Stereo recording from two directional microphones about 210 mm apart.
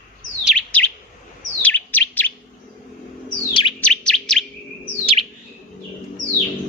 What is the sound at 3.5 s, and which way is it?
Bird, 25° left (ahead or behind).